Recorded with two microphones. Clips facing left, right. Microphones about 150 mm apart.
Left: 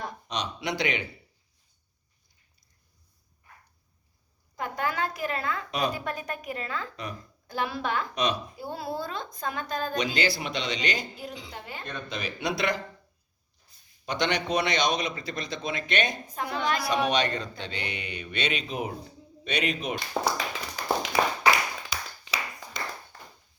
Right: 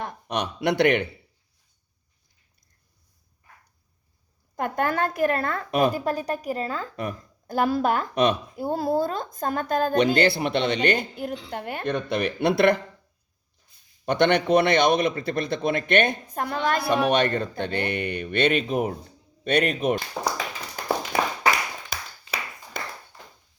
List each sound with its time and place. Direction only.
0.3 s a man's voice: 55° right (ahead or behind)
4.5 s speech: 50° right (ahead or behind)
6.1 s a woman's voice: 35° right (ahead or behind)
6.9 s a man's voice: 50° right (ahead or behind)
14.0 s a man's voice: 55° right (ahead or behind)
21.1 s a sound: 50° right (ahead or behind)
21.8 s clapping: 50° right (ahead or behind)